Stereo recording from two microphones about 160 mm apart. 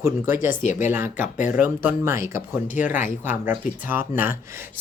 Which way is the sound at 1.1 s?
50° left (ahead or behind).